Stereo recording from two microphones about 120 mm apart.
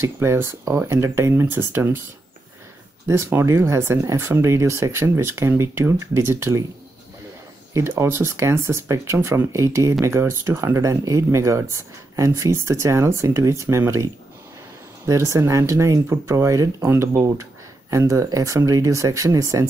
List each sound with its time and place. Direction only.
0.0 s speech: 20° right (ahead or behind)
3.1 s speech: 20° right (ahead or behind)
7.7 s speech: 20° right (ahead or behind)